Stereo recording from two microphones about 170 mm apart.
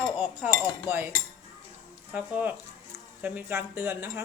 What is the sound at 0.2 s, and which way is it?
Speech, 10° right (ahead or behind).